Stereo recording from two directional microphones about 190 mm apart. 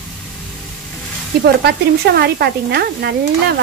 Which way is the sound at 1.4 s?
60° right (ahead or behind).